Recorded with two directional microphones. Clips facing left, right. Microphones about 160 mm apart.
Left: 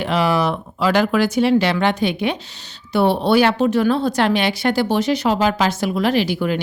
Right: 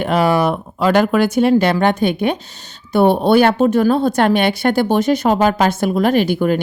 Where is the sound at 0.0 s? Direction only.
50° right (ahead or behind).